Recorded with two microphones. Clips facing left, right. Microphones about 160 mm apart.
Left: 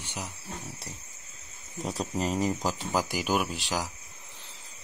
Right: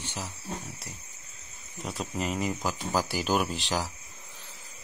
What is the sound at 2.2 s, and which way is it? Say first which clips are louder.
Speech: left 2 dB; 35° left (ahead or behind).